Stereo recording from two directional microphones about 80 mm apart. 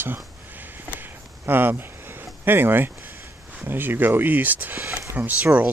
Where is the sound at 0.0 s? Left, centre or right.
Right.